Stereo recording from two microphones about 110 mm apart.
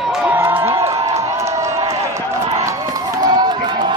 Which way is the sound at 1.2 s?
30° right (ahead or behind).